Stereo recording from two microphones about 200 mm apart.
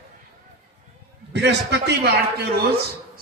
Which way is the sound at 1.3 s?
60° right (ahead or behind).